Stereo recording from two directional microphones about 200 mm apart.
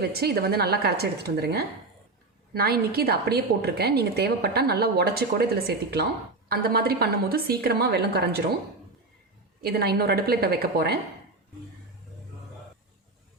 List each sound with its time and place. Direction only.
0.0 s a woman's voice: 50° right (ahead or behind)
9.6 s a woman's voice: 50° right (ahead or behind)